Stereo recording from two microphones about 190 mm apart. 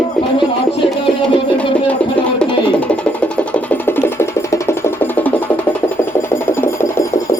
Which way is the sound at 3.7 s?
10° left (ahead or behind).